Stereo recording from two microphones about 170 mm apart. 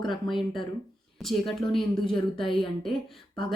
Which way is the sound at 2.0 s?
30° left (ahead or behind).